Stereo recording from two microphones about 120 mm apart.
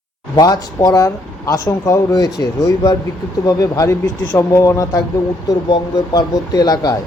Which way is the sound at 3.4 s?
30° left (ahead or behind).